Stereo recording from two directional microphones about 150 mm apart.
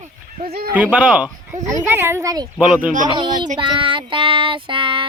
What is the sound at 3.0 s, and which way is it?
Child singing, 30° right (ahead or behind).